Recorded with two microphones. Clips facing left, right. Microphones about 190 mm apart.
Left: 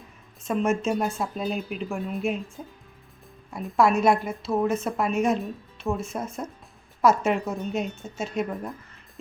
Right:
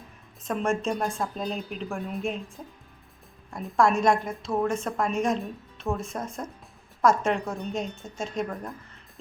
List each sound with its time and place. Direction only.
0.4 s a woman's voice: 5° left (ahead or behind)